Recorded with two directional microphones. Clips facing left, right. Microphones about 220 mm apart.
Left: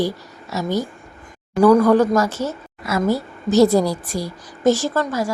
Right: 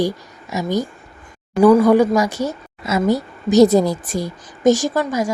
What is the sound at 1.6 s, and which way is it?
A woman's voice, 10° right (ahead or behind).